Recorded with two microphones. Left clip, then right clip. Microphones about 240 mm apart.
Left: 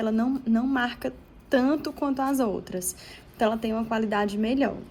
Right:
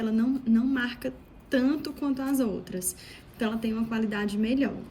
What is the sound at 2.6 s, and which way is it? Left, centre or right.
Speech, left.